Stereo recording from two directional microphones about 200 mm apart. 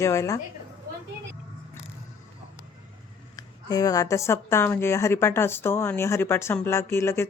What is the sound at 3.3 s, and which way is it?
A woman's voice, 20° left (ahead or behind).